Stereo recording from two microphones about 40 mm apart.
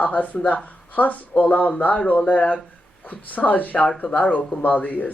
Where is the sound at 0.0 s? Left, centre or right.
Left.